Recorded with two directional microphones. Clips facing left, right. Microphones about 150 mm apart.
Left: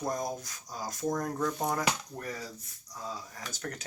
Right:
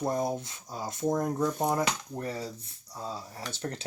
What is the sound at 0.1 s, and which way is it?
Speech, 30° right (ahead or behind).